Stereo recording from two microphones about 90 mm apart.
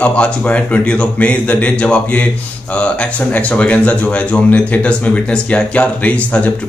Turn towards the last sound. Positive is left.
turn(degrees=15)  # may be behind; listen again after turning